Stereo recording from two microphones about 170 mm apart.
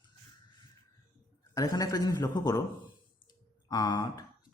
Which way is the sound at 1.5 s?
20° left (ahead or behind).